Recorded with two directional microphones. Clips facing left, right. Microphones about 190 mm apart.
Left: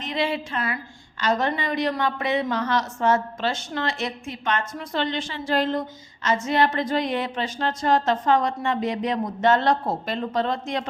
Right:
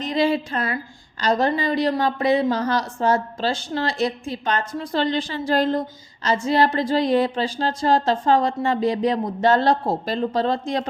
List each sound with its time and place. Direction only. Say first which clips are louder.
0.0 s a woman's voice: right 5 dB; 40° right (ahead or behind)